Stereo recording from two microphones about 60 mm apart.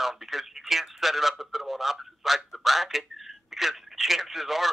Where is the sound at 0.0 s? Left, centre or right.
Centre.